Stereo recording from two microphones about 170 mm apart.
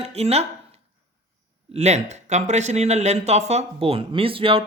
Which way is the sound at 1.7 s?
40° right (ahead or behind).